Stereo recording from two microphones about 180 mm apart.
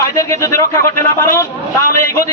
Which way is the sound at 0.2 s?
15° left (ahead or behind).